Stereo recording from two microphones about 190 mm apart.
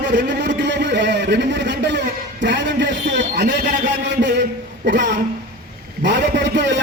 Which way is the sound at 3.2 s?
60° right (ahead or behind).